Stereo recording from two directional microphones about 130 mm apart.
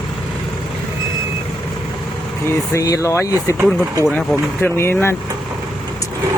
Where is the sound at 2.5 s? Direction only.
25° left (ahead or behind).